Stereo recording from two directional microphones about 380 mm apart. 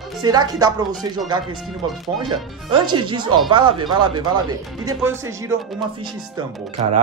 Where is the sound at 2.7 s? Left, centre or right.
Centre.